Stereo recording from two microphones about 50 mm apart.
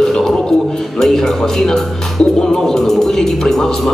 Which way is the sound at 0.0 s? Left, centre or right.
Centre.